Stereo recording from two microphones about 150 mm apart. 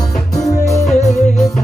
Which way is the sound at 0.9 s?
50° left (ahead or behind).